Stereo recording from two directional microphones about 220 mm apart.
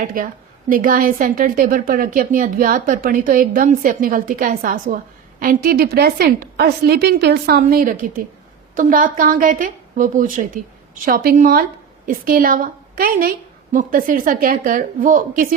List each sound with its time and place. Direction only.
0.0 s a woman's voice: 40° right (ahead or behind)